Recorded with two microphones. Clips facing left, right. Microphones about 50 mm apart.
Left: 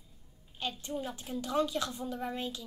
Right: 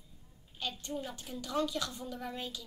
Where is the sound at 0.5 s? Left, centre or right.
Centre.